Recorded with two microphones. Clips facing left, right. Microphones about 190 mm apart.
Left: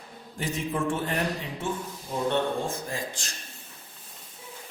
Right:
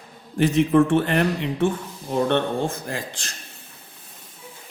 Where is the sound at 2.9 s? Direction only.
65° right (ahead or behind).